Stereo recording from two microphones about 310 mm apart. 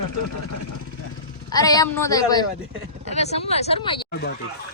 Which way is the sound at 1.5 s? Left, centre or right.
Centre.